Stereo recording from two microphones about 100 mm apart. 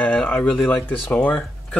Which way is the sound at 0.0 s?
15° left (ahead or behind).